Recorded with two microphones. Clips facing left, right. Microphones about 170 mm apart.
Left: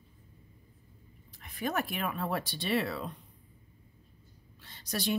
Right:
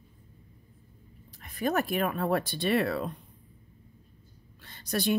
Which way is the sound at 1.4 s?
40° right (ahead or behind).